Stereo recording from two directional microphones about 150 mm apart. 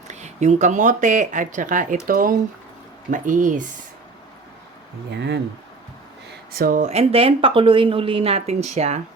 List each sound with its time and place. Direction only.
0.1 s speech: 50° right (ahead or behind)
6.5 s speech: 75° right (ahead or behind)
6.8 s speech: 45° right (ahead or behind)